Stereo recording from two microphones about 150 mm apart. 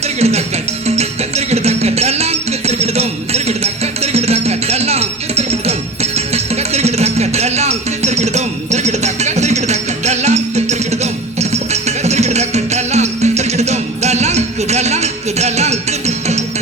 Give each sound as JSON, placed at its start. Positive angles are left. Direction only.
{"t": 0.2, "sound": "music", "side_deg": -45}